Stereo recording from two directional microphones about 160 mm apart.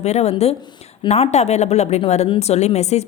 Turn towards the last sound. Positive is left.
turn(degrees=45)  # may be behind; listen again after turning